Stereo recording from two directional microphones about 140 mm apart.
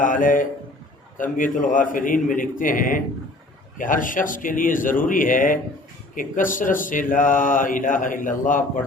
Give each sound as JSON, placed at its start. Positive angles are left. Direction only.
{"t": 0.0, "sound": "speech", "side_deg": 70}